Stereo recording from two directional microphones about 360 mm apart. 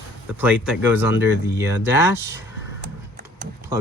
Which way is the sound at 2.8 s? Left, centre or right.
Right.